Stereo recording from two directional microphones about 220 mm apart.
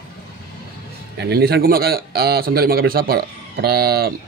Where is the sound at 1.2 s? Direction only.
45° right (ahead or behind).